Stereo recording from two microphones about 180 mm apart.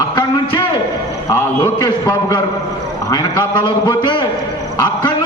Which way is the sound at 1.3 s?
20° left (ahead or behind).